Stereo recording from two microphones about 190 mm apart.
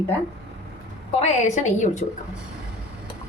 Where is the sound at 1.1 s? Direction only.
35° left (ahead or behind).